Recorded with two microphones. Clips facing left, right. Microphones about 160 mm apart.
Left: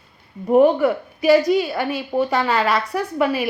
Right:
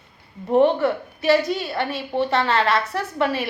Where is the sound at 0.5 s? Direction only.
5° left (ahead or behind).